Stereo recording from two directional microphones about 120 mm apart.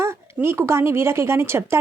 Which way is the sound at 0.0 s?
20° right (ahead or behind).